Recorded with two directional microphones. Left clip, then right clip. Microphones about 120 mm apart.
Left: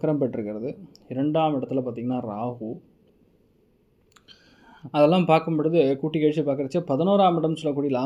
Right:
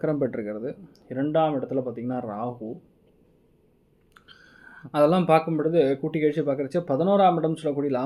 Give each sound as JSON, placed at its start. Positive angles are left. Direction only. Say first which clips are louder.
{"t": 0.0, "sound": "speech", "louder": "left 1 dB", "side_deg": 20}
{"t": 1.0, "sound": "speech", "louder": "even", "side_deg": 25}
{"t": 4.1, "sound": "speech", "louder": "right 2 dB", "side_deg": 25}